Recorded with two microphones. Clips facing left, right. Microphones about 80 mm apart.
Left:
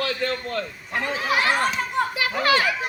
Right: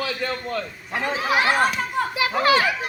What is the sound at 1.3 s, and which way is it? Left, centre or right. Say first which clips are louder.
A child's voice: right 2 dB; right.